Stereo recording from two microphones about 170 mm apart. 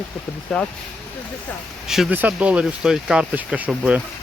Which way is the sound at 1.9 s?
5° right (ahead or behind).